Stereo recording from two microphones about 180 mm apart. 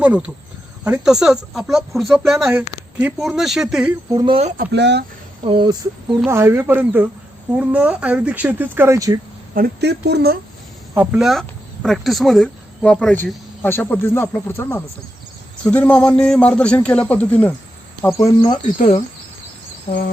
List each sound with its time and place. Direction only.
0.0 s speech: 5° right (ahead or behind)
4.1 s speech: 25° right (ahead or behind)
4.7 s speech: 75° right (ahead or behind)
5.5 s speech: 25° right (ahead or behind)
6.2 s speech: 15° right (ahead or behind)
9.6 s speech: 60° right (ahead or behind)
10.9 s a man's voice: 10° right (ahead or behind); by 17.5 s 10° left (ahead or behind)
19.9 s cricket: 30° left (ahead or behind)